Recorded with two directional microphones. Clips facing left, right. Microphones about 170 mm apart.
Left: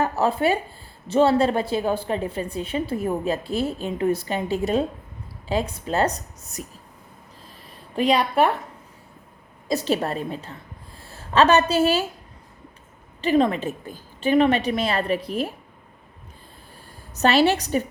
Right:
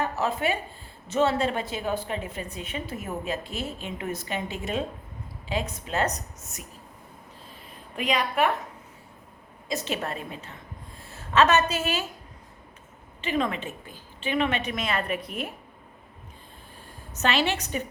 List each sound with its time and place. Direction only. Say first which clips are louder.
0.0 s a woman's voice: left 6 dB; 35° left (ahead or behind)
7.9 s a woman's voice: left 6 dB; 35° left (ahead or behind)
9.6 s a woman's voice: left 7 dB; 35° left (ahead or behind)
13.2 s a woman's voice: left 8 dB; 35° left (ahead or behind)
17.2 s a woman's voice: left 7 dB; 40° left (ahead or behind)